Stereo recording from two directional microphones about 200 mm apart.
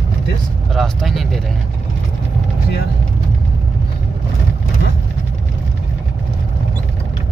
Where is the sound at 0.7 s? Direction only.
Centre (ahead or behind).